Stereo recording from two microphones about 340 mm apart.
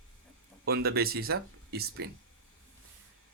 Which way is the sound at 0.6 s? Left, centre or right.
Right.